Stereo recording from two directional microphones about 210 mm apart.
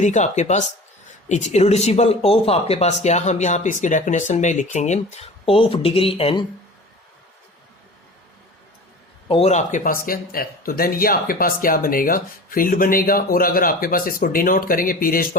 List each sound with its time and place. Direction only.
0.0 s speech: 35° left (ahead or behind)
9.3 s speech: 30° left (ahead or behind)